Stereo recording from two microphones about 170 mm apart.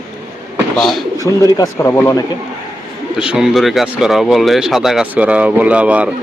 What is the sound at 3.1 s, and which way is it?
Speech, 5° right (ahead or behind).